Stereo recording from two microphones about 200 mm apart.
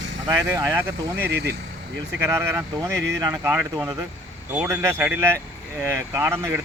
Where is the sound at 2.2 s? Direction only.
10° right (ahead or behind).